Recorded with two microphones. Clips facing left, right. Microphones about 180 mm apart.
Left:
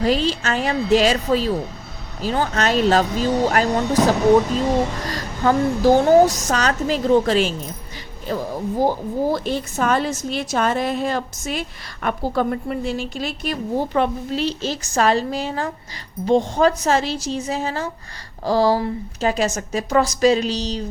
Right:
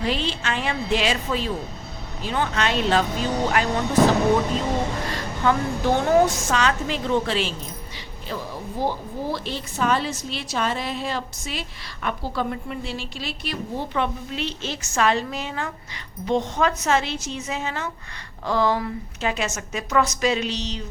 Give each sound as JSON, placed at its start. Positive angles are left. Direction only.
{"t": 0.0, "sound": "a woman's voice", "side_deg": 40}
{"t": 5.0, "sound": "a woman's voice", "side_deg": 40}